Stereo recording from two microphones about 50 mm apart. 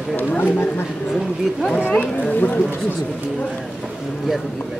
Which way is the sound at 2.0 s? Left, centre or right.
Left.